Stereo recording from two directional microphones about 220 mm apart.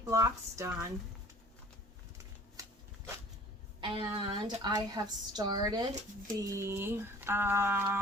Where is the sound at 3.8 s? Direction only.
25° right (ahead or behind).